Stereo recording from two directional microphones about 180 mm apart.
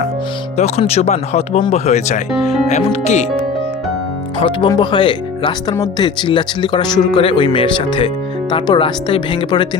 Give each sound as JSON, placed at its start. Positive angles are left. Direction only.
{"t": 0.5, "sound": "speech", "side_deg": 35}
{"t": 4.4, "sound": "speech", "side_deg": 25}